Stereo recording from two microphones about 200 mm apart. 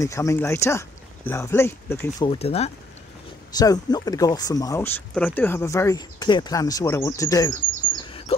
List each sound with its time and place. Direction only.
0.0 s speech: 15° left (ahead or behind)
2.2 s speech: 30° left (ahead or behind)
3.5 s speech: 20° left (ahead or behind)